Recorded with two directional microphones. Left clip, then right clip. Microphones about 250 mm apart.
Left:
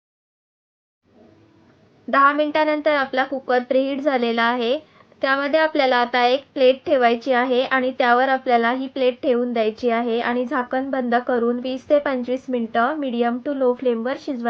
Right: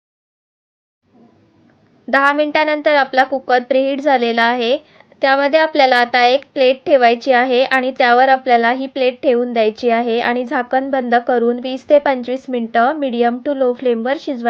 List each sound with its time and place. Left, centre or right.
2.1 s a woman's voice: centre